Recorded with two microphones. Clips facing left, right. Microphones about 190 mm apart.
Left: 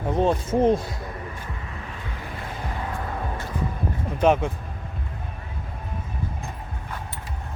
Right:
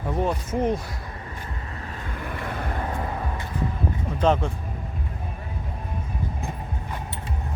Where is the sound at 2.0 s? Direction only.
55° right (ahead or behind).